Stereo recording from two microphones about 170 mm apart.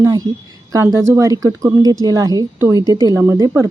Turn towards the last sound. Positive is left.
turn(degrees=-15)  # may be behind; listen again after turning